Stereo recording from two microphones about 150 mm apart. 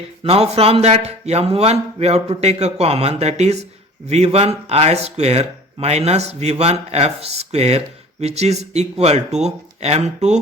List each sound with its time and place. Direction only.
0.3 s a man's voice: 45° right (ahead or behind)